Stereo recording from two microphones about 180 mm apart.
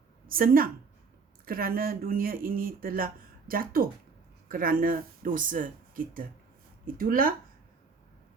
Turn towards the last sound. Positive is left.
turn(degrees=-50)  # may be behind; listen again after turning